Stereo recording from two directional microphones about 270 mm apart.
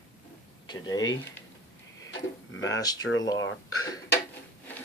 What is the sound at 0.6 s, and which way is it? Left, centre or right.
Speech, centre.